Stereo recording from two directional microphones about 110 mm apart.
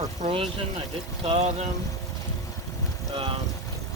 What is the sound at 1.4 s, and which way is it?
Speech, 80° right.